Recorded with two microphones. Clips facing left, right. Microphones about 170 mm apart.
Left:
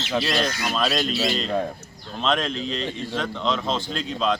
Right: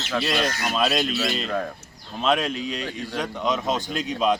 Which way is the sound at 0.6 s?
5° right (ahead or behind).